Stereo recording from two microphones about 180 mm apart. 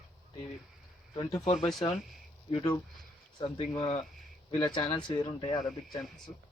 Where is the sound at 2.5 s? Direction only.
35° left (ahead or behind).